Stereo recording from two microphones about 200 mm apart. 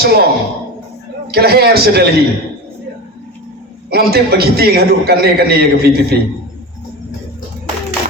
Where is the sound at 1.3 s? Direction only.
50° right (ahead or behind).